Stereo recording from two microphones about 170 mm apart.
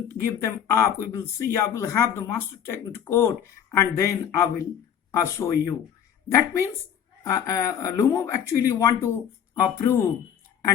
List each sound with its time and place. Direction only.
0.1 s speech: 15° left (ahead or behind)